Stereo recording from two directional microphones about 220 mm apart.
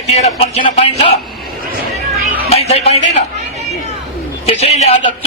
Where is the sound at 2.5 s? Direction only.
30° left (ahead or behind).